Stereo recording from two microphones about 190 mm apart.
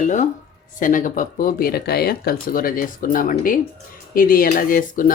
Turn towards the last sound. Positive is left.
turn(degrees=45)  # may be behind; listen again after turning